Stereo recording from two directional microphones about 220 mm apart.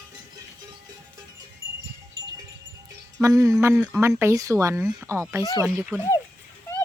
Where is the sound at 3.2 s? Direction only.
15° right (ahead or behind).